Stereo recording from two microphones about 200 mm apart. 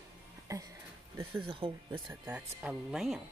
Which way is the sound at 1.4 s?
25° right (ahead or behind).